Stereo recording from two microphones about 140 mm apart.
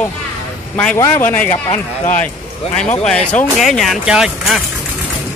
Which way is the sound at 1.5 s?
60° left (ahead or behind).